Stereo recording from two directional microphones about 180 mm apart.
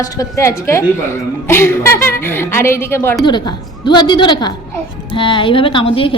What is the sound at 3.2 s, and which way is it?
A woman's voice, 25° left (ahead or behind).